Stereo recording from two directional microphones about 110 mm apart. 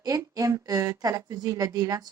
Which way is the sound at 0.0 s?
30° right (ahead or behind).